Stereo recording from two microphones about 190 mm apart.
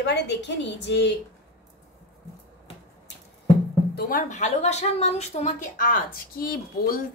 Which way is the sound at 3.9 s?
45° left (ahead or behind).